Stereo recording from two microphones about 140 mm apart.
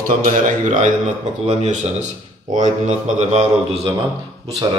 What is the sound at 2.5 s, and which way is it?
Speech, 55° right (ahead or behind).